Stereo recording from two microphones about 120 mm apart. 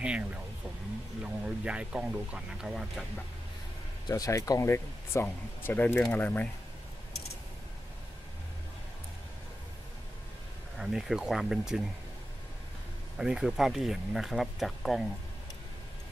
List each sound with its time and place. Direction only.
0.0 s a sound: 10° right (ahead or behind)
1.2 s speech: 10° right (ahead or behind)
4.1 s speech: 25° left (ahead or behind)
10.8 s speech: 5° right (ahead or behind)
13.2 s speech: 5° right (ahead or behind)